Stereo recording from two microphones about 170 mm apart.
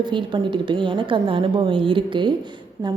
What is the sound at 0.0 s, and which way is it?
A woman's voice, 30° right (ahead or behind).